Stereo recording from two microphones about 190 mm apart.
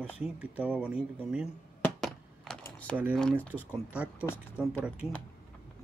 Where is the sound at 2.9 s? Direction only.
5° left (ahead or behind).